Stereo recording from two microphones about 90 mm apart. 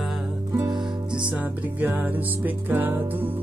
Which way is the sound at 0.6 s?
60° right (ahead or behind).